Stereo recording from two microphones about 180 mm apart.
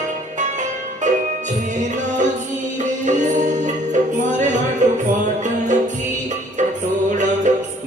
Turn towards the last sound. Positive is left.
turn(degrees=-40)  # may be behind; listen again after turning